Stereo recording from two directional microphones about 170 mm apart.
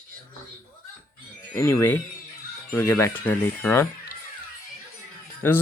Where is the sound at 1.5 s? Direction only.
15° left (ahead or behind).